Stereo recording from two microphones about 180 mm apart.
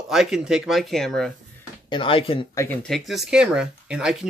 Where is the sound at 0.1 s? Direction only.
Centre (ahead or behind).